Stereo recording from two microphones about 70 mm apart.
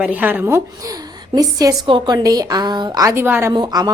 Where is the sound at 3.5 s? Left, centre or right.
Right.